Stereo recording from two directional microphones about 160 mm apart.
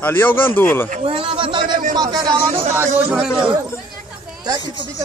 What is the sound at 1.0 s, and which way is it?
A man's voice, 35° right (ahead or behind).